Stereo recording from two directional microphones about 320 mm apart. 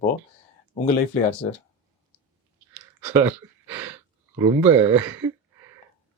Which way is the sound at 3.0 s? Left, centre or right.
Centre.